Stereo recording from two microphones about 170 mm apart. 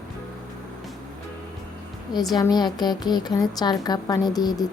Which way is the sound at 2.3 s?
25° left (ahead or behind).